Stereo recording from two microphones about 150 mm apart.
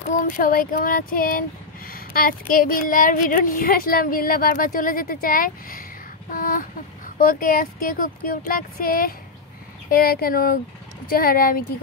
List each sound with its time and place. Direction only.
0.1 s speech: 65° left (ahead or behind)
6.3 s a sound: 65° left (ahead or behind)
7.2 s speech: 70° left (ahead or behind)